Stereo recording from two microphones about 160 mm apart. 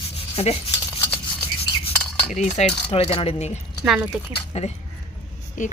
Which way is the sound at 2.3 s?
45° left (ahead or behind).